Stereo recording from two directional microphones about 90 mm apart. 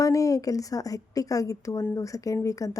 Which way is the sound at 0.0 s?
40° left (ahead or behind).